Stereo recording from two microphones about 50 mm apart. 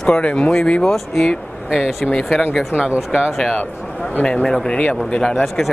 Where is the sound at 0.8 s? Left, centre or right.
Centre.